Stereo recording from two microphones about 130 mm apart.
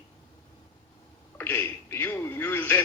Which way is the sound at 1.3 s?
15° left (ahead or behind).